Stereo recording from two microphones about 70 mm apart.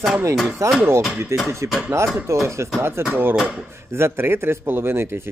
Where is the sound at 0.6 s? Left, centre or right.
Right.